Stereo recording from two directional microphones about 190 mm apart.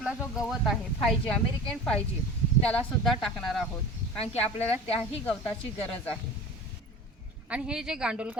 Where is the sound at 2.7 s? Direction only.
5° left (ahead or behind).